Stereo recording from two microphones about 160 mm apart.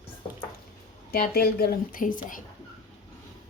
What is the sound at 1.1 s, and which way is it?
Speech, 75° left (ahead or behind).